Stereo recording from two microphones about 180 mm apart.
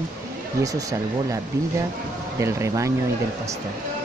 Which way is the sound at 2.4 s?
15° right (ahead or behind).